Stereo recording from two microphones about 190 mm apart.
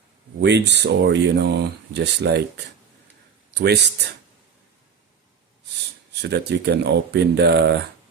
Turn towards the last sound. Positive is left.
turn(degrees=-60)  # may be behind; listen again after turning